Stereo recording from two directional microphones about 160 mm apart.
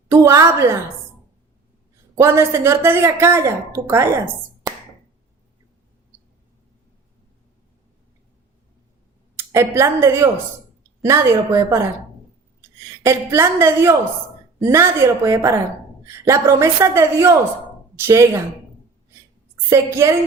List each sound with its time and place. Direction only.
0.1 s a woman's voice: 15° right (ahead or behind)
2.1 s a woman's voice: 15° right (ahead or behind)
9.4 s a woman's voice: 15° right (ahead or behind)
13.1 s a woman's voice: 15° right (ahead or behind)
19.7 s a woman's voice: 20° right (ahead or behind)